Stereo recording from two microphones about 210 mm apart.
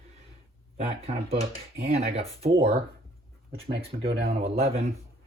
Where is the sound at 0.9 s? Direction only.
25° right (ahead or behind).